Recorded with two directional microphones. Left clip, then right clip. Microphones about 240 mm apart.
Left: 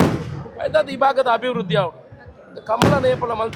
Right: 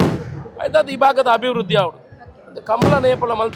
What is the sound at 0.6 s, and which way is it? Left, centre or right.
A man's voice, left.